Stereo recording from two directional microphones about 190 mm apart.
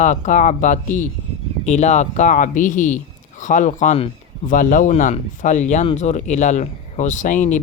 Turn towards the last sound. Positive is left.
turn(degrees=40)  # may be behind; listen again after turning